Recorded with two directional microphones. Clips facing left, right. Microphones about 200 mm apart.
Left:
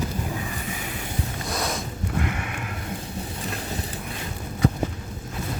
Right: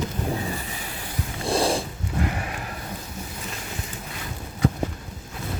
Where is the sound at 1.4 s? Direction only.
30° right (ahead or behind).